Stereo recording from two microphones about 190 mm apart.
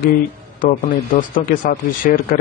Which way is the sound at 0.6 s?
45° left (ahead or behind).